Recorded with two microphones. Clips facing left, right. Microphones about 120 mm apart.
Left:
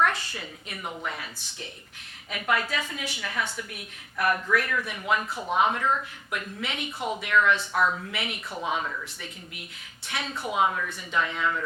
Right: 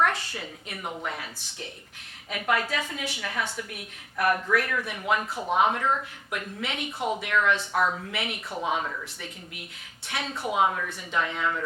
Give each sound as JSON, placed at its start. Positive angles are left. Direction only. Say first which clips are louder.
{"t": 0.0, "sound": "a woman's voice", "louder": "even", "side_deg": -50}
{"t": 6.3, "sound": "a woman's voice", "louder": "even", "side_deg": -50}
{"t": 7.7, "sound": "speech", "louder": "even", "side_deg": -35}
{"t": 8.1, "sound": "a woman's voice", "louder": "right 1 dB", "side_deg": -50}
{"t": 8.6, "sound": "a woman's voice", "louder": "right 1 dB", "side_deg": -40}